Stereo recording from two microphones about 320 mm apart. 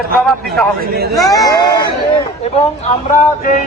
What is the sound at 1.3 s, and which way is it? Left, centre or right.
Speech, centre.